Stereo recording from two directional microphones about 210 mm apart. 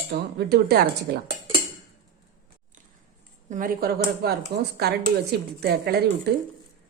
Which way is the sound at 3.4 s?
40° right (ahead or behind).